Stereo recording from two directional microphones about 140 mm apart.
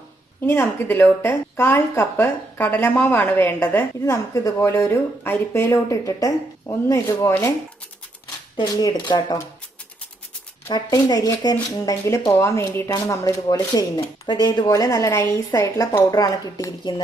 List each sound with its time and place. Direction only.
0.5 s a woman's voice: 15° left (ahead or behind)
8.5 s speech: 25° left (ahead or behind)
10.7 s a woman's voice: 30° left (ahead or behind)